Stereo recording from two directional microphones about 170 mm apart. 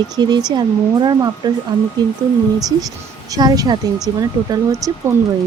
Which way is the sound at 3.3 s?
20° right (ahead or behind).